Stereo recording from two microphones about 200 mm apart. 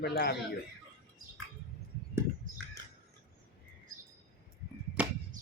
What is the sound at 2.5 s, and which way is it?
Bird, 40° right (ahead or behind).